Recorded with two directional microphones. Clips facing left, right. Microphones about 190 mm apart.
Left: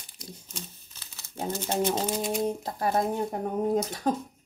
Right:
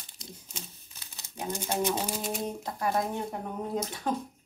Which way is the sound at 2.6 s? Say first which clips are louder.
Left 3 dB; 35° left (ahead or behind).